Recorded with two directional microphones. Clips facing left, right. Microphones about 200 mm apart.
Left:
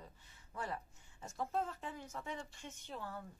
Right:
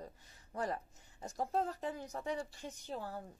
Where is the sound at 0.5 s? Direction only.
40° right (ahead or behind).